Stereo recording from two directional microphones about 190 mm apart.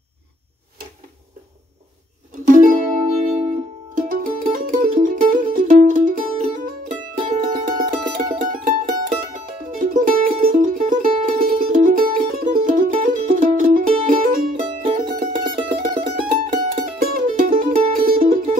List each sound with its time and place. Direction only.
2.4 s music: 45° right (ahead or behind)